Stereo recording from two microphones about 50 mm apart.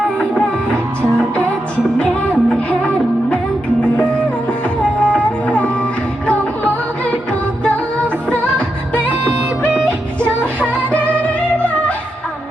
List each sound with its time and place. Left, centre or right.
2.0 s music: left
4.9 s music: left
7.6 s music: left